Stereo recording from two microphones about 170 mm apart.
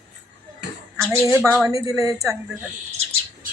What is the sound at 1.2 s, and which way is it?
Speech, 10° right (ahead or behind).